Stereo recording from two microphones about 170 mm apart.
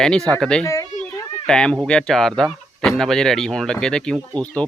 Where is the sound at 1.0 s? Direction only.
5° left (ahead or behind).